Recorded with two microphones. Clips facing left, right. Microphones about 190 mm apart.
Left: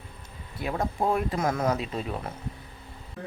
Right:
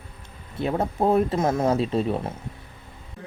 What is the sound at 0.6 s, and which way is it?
Speech, 25° right (ahead or behind).